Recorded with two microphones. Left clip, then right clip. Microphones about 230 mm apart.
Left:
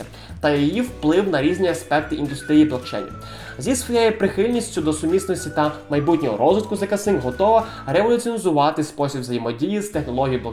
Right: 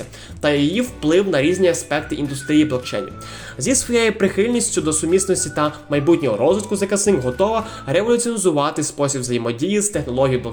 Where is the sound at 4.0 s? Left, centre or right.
Right.